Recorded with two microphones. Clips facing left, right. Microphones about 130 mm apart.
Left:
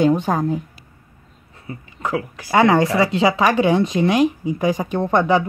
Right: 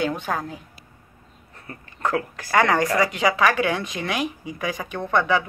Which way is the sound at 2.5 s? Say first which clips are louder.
Left 5 dB; 20° left (ahead or behind).